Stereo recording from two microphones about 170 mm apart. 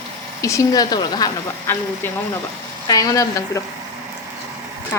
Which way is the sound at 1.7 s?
10° left (ahead or behind).